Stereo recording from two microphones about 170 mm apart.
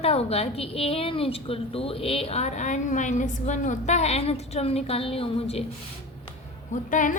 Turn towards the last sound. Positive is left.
turn(degrees=50)  # may be behind; listen again after turning